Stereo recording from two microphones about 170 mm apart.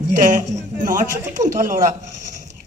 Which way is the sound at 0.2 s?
45° right (ahead or behind).